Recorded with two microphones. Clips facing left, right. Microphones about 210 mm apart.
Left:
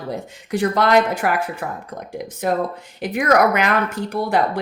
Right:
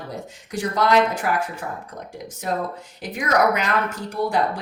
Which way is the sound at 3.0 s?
65° left (ahead or behind).